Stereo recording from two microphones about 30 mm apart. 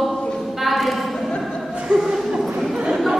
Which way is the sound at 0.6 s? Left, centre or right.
Centre.